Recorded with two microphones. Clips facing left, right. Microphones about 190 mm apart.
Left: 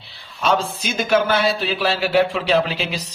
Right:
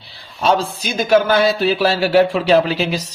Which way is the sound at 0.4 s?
35° right (ahead or behind).